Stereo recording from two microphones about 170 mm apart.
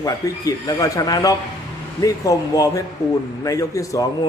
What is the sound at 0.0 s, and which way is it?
A man's voice, 20° left (ahead or behind).